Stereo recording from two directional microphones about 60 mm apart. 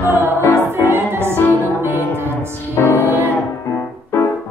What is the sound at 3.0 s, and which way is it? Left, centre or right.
Music, right.